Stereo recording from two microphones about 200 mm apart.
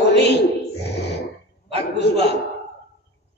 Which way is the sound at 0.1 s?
55° left (ahead or behind).